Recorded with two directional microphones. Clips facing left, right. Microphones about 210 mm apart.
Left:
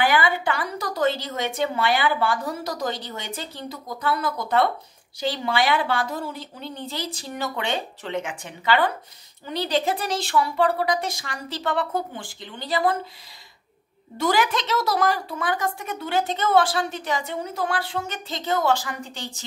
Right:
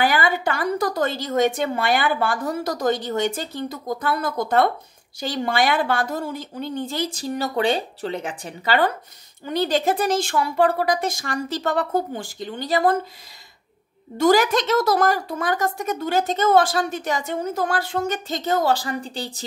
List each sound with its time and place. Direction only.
0.0 s a woman's voice: 40° right (ahead or behind)
14.1 s a woman's voice: 45° right (ahead or behind)